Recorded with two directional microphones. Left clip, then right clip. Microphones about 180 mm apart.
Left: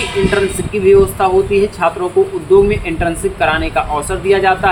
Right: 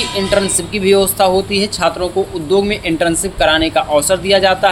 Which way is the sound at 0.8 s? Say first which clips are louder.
Left 2 dB; 45° right (ahead or behind).